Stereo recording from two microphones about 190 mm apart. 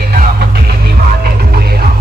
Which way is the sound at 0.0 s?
50° right (ahead or behind).